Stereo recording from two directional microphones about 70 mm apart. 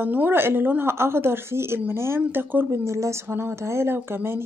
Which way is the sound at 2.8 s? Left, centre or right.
Right.